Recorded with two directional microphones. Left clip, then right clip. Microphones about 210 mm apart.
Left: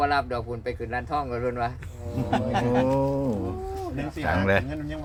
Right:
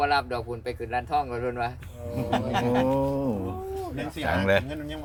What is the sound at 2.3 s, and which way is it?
Speech, 40° right (ahead or behind).